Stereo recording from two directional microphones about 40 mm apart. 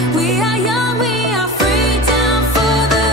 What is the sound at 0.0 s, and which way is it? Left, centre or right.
Music, centre.